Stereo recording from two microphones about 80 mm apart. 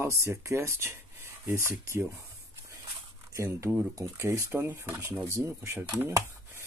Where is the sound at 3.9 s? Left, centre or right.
Right.